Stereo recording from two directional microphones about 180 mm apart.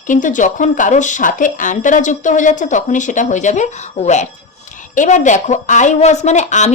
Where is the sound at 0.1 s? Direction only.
45° left (ahead or behind).